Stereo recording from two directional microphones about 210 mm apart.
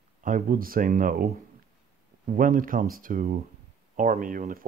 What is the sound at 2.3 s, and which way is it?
Speech, 40° right (ahead or behind).